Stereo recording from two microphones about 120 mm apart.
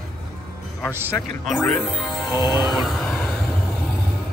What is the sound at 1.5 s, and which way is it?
Speech, 5° left (ahead or behind).